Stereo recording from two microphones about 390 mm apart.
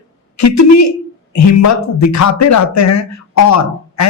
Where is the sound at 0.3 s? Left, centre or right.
Left.